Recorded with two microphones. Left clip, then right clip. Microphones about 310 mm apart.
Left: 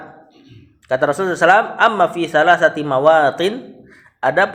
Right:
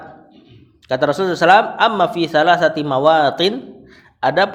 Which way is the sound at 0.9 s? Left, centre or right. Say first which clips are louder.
Even; right.